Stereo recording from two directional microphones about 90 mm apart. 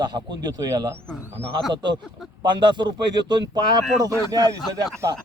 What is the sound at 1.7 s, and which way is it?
A man's voice, 60° right (ahead or behind).